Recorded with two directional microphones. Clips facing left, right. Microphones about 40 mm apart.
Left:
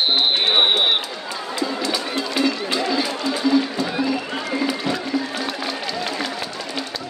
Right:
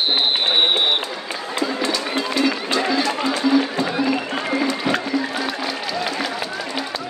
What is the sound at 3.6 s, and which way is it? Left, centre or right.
Music, right.